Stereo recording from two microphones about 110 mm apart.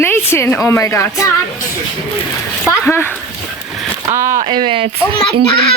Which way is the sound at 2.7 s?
20° left (ahead or behind).